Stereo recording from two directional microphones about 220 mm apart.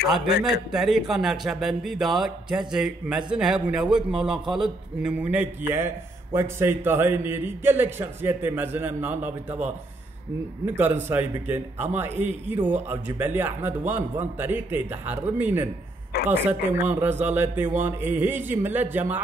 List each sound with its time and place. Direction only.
0.1 s a man's voice: centre (ahead or behind)
10.6 s a man's voice: 10° right (ahead or behind)
16.1 s a woman's voice: 45° left (ahead or behind)
16.4 s a man's voice: 10° right (ahead or behind)